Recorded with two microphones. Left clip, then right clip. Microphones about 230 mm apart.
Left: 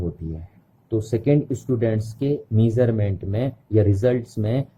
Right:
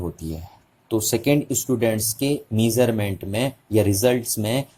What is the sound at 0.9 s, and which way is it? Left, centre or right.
Speech, centre.